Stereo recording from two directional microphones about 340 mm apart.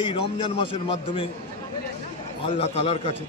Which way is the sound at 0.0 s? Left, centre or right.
Centre.